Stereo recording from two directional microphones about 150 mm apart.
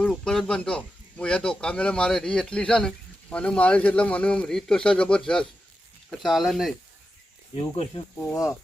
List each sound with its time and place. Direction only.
0.0 s speech: 5° left (ahead or behind)
7.5 s speech: 35° left (ahead or behind)
8.2 s speech: 20° left (ahead or behind)